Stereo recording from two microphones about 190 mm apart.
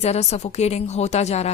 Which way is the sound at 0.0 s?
35° left (ahead or behind).